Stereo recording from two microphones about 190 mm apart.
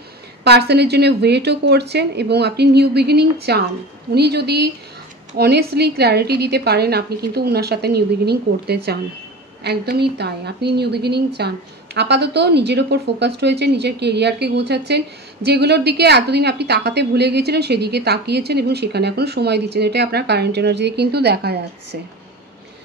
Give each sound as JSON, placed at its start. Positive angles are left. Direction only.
{"t": 0.4, "sound": "a woman's voice", "side_deg": -60}